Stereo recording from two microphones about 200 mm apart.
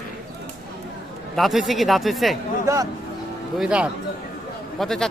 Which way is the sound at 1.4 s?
Centre (ahead or behind).